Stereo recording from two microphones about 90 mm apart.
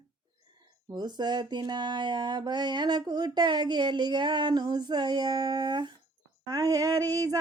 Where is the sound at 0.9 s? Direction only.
55° right (ahead or behind).